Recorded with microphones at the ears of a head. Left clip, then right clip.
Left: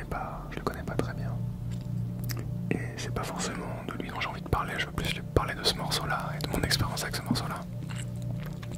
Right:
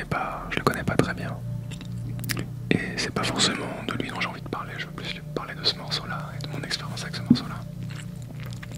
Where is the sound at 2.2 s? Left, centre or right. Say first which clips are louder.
Right 9 dB; right.